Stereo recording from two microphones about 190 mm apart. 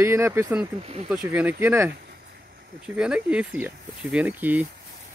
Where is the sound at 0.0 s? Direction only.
15° right (ahead or behind).